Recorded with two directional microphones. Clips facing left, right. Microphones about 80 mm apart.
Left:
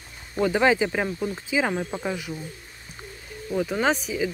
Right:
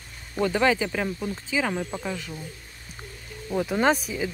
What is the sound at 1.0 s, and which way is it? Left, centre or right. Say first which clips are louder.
Speech: left 2 dB; centre.